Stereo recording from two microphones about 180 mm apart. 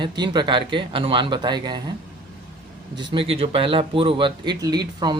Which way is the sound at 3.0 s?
30° right (ahead or behind).